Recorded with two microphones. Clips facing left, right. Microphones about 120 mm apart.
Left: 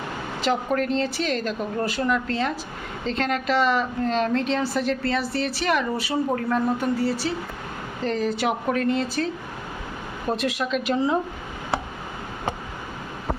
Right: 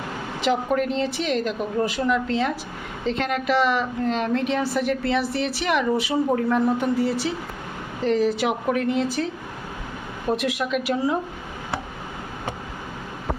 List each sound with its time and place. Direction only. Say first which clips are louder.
0.4 s a woman's voice: right 1 dB; 15° right (ahead or behind)